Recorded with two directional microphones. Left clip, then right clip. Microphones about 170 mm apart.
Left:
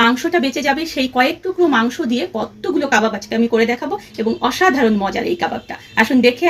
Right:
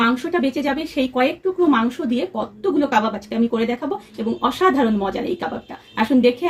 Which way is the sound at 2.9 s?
45° left (ahead or behind).